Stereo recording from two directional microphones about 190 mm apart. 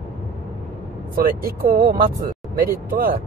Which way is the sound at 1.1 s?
50° right (ahead or behind).